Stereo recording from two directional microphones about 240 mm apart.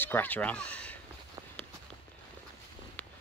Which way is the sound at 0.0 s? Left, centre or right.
Centre.